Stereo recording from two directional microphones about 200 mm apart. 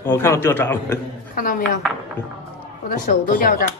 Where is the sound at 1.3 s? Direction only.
45° left (ahead or behind).